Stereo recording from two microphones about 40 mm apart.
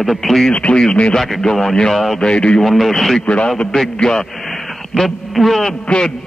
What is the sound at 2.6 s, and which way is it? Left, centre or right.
Speech, centre.